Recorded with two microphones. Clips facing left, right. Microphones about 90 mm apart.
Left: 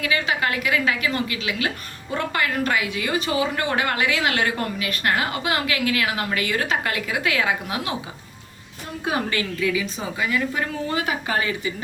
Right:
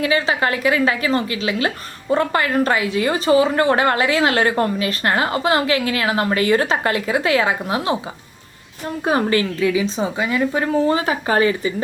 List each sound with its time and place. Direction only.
0.0 s a woman's voice: 30° right (ahead or behind)
9.0 s a woman's voice: 40° right (ahead or behind)